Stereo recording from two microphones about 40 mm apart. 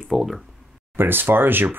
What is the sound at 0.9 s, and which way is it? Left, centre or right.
Speech, right.